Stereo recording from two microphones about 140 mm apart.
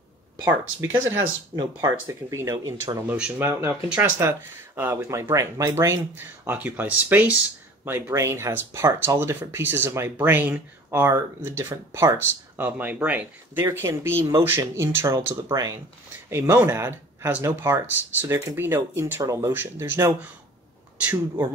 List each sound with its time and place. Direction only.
0.7 s speech: 20° right (ahead or behind)
3.1 s speech: 10° right (ahead or behind)